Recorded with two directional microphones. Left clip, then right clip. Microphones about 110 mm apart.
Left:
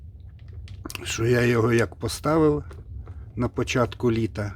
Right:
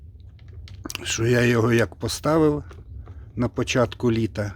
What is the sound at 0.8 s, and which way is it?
Speech, 35° right (ahead or behind).